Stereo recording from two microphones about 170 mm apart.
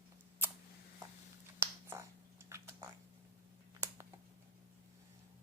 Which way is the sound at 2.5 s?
15° right (ahead or behind).